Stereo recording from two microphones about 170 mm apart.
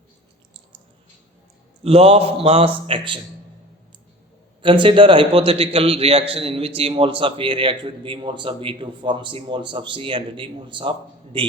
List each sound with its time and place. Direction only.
1.8 s a man's voice: 35° right (ahead or behind)
4.6 s a man's voice: 30° right (ahead or behind)